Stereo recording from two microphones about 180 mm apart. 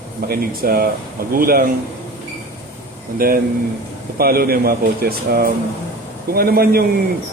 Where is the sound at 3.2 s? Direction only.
55° right (ahead or behind).